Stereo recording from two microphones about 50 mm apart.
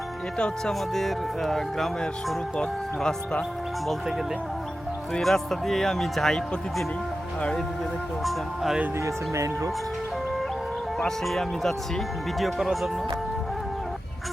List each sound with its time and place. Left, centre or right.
0.3 s speech: centre
0.7 s speech: centre
5.2 s speech: centre
8.2 s speech: centre
9.0 s speech: right
10.9 s speech: centre
12.5 s speech: centre